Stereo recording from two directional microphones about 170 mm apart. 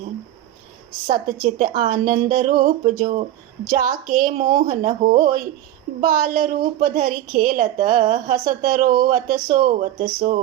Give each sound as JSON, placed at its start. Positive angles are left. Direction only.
{"t": 1.1, "sound": "a woman's voice", "side_deg": -50}